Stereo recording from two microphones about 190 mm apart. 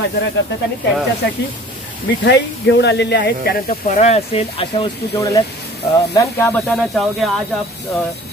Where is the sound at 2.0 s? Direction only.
65° left (ahead or behind).